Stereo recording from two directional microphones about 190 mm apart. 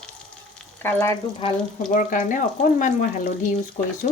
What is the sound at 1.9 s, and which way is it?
Frying, 45° left (ahead or behind).